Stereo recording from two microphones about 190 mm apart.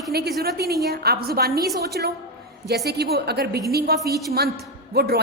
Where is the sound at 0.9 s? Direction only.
55° right (ahead or behind).